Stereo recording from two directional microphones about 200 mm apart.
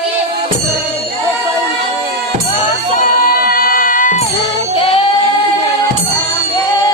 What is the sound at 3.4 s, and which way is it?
Music, 45° left (ahead or behind).